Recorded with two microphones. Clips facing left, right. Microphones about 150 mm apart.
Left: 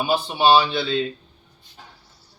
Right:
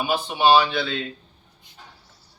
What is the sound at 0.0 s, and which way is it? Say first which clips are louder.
Speech: left 1 dB; 30° left (ahead or behind).